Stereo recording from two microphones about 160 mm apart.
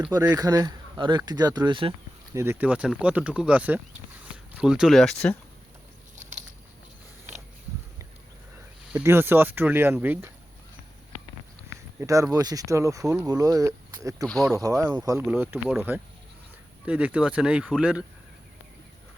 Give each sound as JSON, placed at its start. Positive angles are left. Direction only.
{"t": 0.1, "sound": "speech", "side_deg": -20}
{"t": 2.3, "sound": "speech", "side_deg": -15}
{"t": 8.9, "sound": "speech", "side_deg": -10}
{"t": 11.9, "sound": "speech", "side_deg": -20}
{"t": 14.3, "sound": "speech", "side_deg": 5}
{"t": 14.5, "sound": "speech", "side_deg": -20}
{"t": 15.3, "sound": "speech", "side_deg": -10}